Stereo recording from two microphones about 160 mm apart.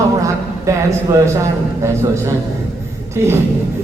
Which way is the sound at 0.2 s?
20° right (ahead or behind).